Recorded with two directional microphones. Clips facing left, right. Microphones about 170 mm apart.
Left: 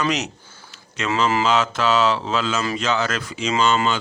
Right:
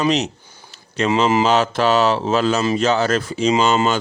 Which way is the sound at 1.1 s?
20° right (ahead or behind).